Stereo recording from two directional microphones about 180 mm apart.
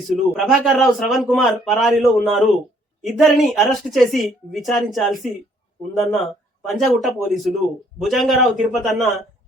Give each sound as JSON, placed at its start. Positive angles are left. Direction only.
{"t": 0.3, "sound": "a woman's voice", "side_deg": 0}